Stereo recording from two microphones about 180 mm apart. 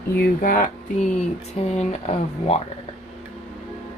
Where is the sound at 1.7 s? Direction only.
35° left (ahead or behind).